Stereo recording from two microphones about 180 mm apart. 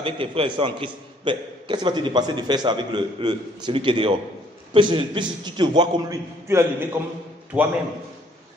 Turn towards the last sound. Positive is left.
turn(degrees=-5)  # may be behind; listen again after turning